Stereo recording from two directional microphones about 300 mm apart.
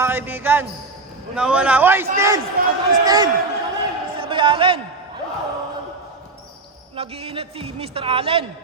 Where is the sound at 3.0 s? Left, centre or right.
Centre.